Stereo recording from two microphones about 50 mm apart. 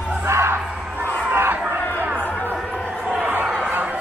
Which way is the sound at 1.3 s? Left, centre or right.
Right.